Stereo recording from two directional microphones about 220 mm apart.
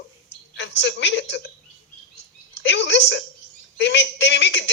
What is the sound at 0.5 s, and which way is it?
Speech, 55° left (ahead or behind).